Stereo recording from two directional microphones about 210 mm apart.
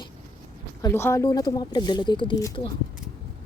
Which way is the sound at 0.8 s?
15° left (ahead or behind).